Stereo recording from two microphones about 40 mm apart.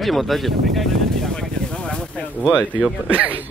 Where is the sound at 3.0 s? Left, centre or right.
Right.